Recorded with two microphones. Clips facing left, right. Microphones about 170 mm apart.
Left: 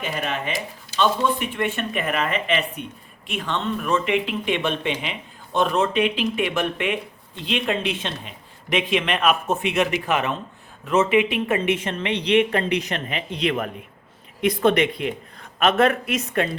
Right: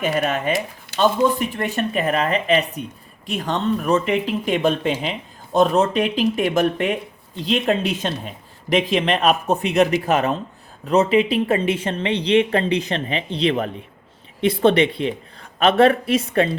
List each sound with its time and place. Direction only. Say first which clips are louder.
0.2 s speech: right 6 dB; 40° right (ahead or behind)